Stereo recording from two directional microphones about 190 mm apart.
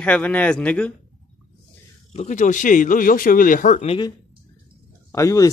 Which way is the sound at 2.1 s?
40° left (ahead or behind).